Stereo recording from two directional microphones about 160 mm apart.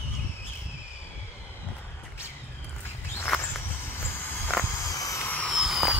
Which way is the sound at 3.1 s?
10° left (ahead or behind).